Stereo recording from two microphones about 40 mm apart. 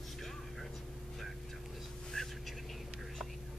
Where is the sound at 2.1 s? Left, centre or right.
Centre.